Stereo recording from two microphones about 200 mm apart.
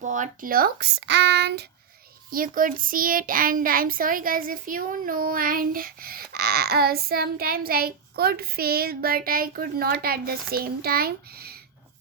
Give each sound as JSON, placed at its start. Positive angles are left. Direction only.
{"t": 0.0, "sound": "speech", "side_deg": -40}
{"t": 2.3, "sound": "speech", "side_deg": -45}